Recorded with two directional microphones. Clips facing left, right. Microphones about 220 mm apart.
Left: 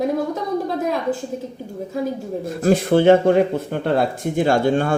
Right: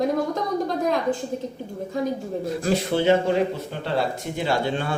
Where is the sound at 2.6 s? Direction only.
50° left (ahead or behind).